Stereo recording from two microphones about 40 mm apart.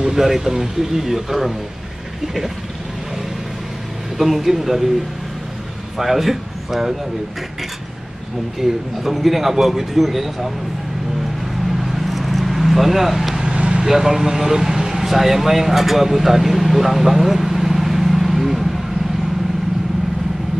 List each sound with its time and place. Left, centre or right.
0.0 s a man's voice: centre
4.2 s a man's voice: centre
5.9 s speech: centre
8.5 s a man's voice: centre
11.8 s vehicle: centre
13.4 s vehicle: right
13.7 s speech: centre